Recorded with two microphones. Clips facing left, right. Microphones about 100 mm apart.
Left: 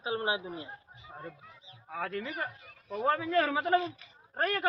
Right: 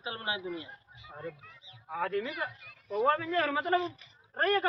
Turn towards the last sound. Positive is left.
turn(degrees=5)  # may be behind; listen again after turning